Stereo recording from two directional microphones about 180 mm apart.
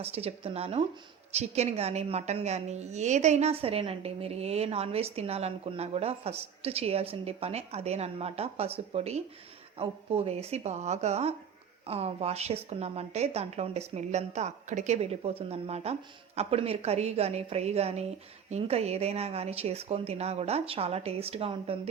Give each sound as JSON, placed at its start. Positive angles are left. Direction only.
{"t": 0.0, "sound": "a woman's voice", "side_deg": -35}